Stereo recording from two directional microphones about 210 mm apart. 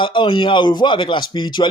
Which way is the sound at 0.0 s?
20° left (ahead or behind).